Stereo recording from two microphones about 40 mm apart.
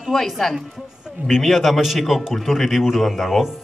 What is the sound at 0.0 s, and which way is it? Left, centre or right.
Speech, centre.